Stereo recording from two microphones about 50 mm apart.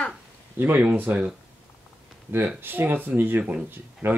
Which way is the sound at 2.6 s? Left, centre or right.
Right.